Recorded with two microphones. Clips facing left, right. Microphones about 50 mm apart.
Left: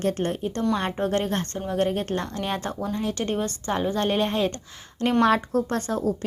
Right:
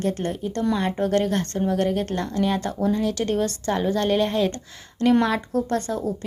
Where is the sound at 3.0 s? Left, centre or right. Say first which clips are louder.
Right 3 dB; left.